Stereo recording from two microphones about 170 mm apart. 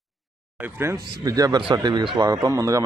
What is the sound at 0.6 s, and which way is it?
Speech, 15° right (ahead or behind).